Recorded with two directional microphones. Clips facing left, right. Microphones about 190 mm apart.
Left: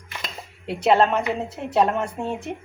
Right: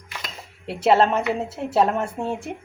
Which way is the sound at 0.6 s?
Centre (ahead or behind).